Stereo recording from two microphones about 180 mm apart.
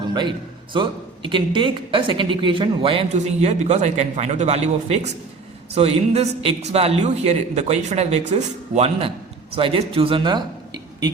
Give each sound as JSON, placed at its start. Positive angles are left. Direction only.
{"t": 0.1, "sound": "a man's voice", "side_deg": -25}